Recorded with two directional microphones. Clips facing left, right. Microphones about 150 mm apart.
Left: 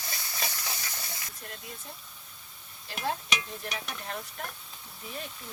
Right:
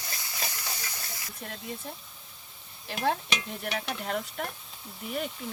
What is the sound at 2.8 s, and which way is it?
Stir, 60° right (ahead or behind).